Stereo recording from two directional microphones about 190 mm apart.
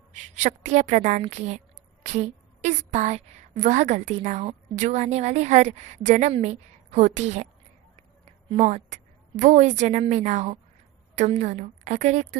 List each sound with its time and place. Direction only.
0.1 s a woman's voice: 40° right (ahead or behind)
8.4 s a woman's voice: 35° right (ahead or behind)